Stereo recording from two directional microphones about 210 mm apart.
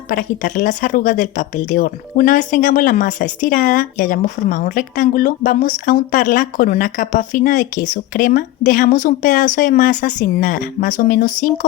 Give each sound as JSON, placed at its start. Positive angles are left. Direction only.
{"t": 0.1, "sound": "speech", "side_deg": 40}